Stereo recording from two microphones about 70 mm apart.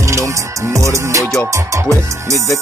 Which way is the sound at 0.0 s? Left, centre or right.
Right.